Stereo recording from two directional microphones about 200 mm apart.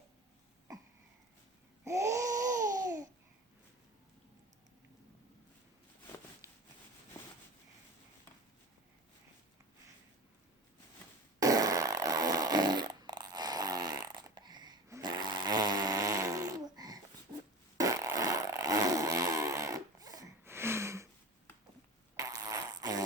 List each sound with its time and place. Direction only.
1.8 s babbling: 15° right (ahead or behind)
6.4 s rub: 15° right (ahead or behind)
11.3 s fart: 15° right (ahead or behind)
22.1 s fart: 15° right (ahead or behind)